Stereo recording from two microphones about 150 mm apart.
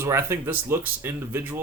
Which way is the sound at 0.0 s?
15° right (ahead or behind).